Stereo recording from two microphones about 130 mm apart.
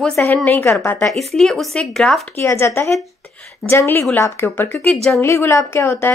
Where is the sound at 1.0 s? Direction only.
Centre (ahead or behind).